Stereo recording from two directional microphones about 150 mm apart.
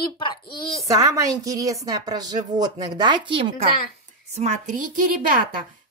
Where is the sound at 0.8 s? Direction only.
20° right (ahead or behind).